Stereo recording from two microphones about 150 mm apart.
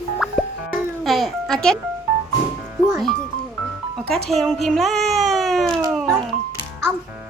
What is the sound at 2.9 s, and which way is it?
Speech, centre (ahead or behind).